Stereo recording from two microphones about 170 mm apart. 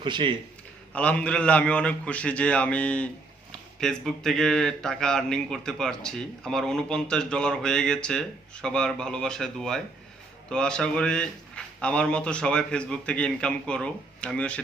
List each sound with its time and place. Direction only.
0.0 s speech: 30° right (ahead or behind)
0.9 s a man's voice: 5° left (ahead or behind)